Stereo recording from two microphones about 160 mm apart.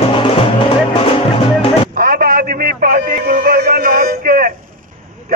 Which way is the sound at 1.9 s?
70° right (ahead or behind).